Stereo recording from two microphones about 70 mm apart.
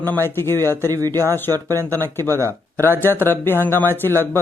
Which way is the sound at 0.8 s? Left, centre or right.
Right.